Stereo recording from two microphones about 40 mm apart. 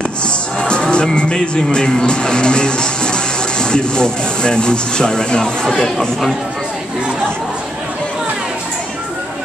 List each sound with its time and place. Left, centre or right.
0.6 s music: left
1.1 s speech: left